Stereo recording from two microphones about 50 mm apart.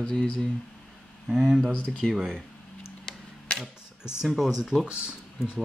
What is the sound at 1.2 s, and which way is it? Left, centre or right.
Speech, centre.